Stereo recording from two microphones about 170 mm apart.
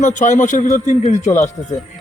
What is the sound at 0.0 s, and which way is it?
Speech, 45° left (ahead or behind).